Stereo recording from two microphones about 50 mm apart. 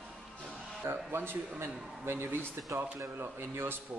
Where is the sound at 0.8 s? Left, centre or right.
Right.